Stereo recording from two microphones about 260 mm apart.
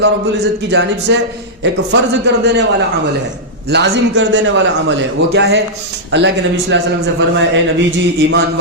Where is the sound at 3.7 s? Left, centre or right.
Right.